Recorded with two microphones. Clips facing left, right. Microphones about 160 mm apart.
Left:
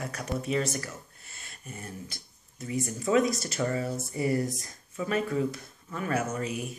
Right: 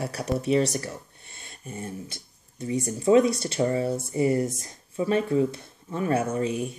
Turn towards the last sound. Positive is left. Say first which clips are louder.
# right 6 dB
turn(degrees=-30)  # may be behind; listen again after turning